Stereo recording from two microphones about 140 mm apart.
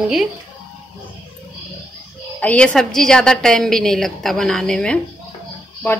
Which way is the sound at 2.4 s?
10° left (ahead or behind).